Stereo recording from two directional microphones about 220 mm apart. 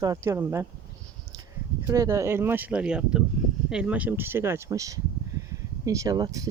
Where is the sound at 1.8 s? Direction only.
15° right (ahead or behind).